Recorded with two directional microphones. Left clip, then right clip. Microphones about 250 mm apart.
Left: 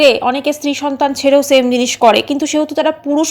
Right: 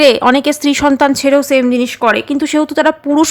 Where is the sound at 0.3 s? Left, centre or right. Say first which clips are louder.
Right 4 dB; right.